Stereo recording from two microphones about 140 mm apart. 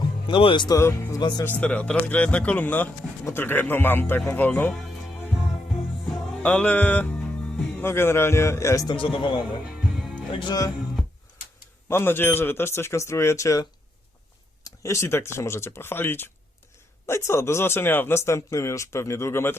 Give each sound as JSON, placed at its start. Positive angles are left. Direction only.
{"t": 0.3, "sound": "speech", "side_deg": 35}
{"t": 0.8, "sound": "speech", "side_deg": 20}
{"t": 1.5, "sound": "speech", "side_deg": 10}
{"t": 4.7, "sound": "music", "side_deg": 0}
{"t": 9.0, "sound": "speech", "side_deg": 35}
{"t": 10.0, "sound": "music", "side_deg": 0}
{"t": 10.3, "sound": "speech", "side_deg": 30}
{"t": 11.9, "sound": "speech", "side_deg": 15}